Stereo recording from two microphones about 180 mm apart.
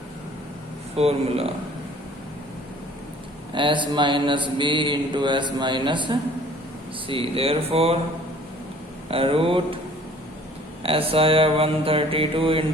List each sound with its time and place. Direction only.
0.9 s mantra: 35° right (ahead or behind)
3.5 s mantra: 25° right (ahead or behind)
9.0 s mantra: 30° right (ahead or behind)
10.8 s mantra: 30° right (ahead or behind)